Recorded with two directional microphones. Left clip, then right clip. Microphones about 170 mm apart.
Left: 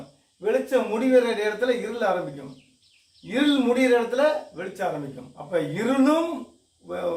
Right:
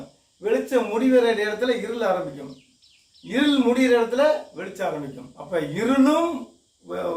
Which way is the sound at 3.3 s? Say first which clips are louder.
Right 1 dB; 10° right (ahead or behind).